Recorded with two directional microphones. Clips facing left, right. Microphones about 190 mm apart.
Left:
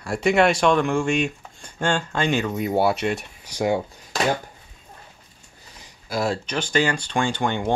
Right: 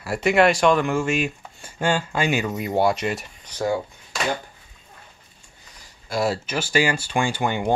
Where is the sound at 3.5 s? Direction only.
15° left (ahead or behind).